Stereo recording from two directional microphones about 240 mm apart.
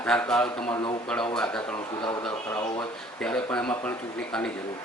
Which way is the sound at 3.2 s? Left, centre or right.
Centre.